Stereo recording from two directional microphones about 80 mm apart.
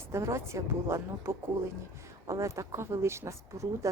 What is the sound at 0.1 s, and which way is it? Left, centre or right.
Speech, right.